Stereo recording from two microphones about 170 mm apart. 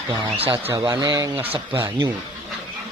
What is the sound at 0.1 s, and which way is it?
Speech, 35° right (ahead or behind).